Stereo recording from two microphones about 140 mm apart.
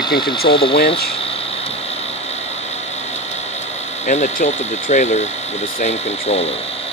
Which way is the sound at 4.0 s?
55° left (ahead or behind).